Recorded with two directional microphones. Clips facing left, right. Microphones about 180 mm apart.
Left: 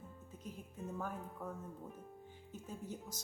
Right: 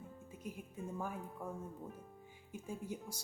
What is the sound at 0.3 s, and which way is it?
Speech, 10° right (ahead or behind).